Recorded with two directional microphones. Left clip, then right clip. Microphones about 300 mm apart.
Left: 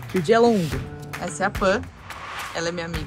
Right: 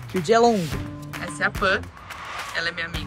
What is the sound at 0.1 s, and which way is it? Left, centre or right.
Speech, centre.